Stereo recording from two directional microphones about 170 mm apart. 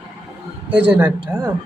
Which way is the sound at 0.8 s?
10° right (ahead or behind).